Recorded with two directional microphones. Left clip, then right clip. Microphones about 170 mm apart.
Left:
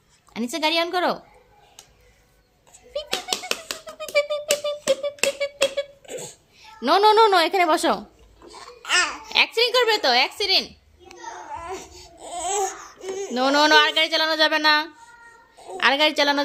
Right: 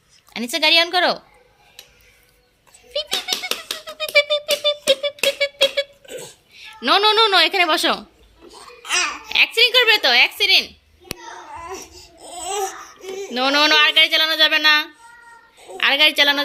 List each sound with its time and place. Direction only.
0.3 s a woman's voice: 10° left (ahead or behind)
2.9 s a sound: 10° left (ahead or behind)
6.5 s a woman's voice: 15° left (ahead or behind)
8.5 s babbling: 15° left (ahead or behind)
12.2 s babbling: 15° left (ahead or behind)
13.0 s speech: 25° left (ahead or behind)
15.8 s speech: 25° left (ahead or behind)